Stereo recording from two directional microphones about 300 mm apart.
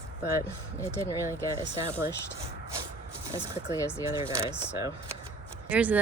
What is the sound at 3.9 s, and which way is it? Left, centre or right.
Speech, centre.